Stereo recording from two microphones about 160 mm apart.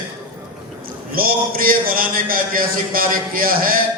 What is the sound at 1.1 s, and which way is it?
A man's voice, 65° right (ahead or behind).